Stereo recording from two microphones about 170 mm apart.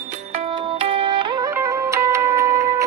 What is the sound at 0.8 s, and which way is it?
Music, 35° right (ahead or behind).